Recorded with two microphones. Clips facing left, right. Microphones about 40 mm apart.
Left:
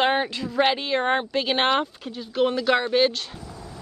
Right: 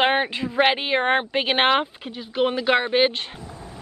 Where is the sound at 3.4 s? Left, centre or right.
Right.